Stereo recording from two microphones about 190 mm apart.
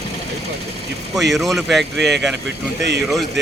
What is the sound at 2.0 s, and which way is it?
Speech, 65° right (ahead or behind).